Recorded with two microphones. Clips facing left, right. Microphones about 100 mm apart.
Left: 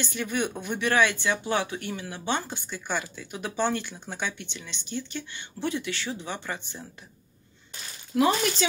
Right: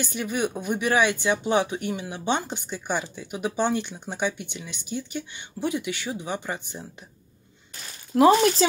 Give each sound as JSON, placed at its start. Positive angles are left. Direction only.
{"t": 0.0, "sound": "speech", "side_deg": -10}
{"t": 8.1, "sound": "speech", "side_deg": -35}